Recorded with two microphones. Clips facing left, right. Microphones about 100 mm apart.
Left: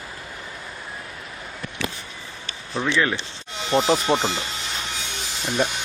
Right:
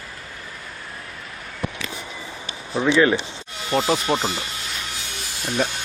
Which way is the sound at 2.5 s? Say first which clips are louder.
Right 4 dB; 15° right (ahead or behind).